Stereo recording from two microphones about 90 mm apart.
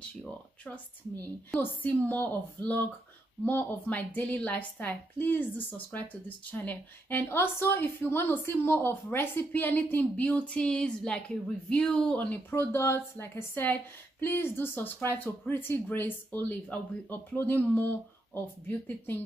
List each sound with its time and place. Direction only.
1.5 s a woman's voice: 15° left (ahead or behind)
12.4 s a woman's voice: 25° left (ahead or behind)